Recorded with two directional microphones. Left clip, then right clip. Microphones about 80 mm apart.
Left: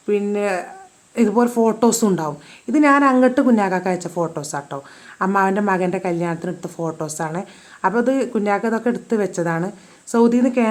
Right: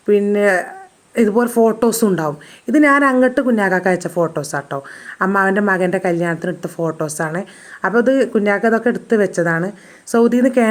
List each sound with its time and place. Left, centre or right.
0.0 s a woman's voice: right
10.1 s a woman's voice: right